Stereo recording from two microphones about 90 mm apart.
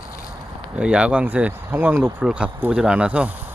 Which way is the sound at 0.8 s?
10° right (ahead or behind).